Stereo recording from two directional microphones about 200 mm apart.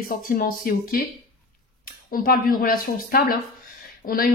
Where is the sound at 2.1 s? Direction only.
45° left (ahead or behind).